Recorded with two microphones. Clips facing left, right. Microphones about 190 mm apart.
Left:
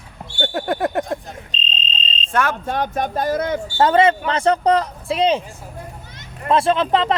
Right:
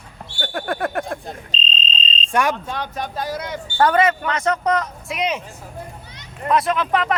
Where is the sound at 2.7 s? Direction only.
50° left (ahead or behind).